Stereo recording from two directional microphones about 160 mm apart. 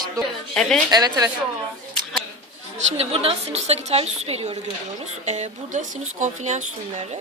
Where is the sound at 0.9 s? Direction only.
25° right (ahead or behind).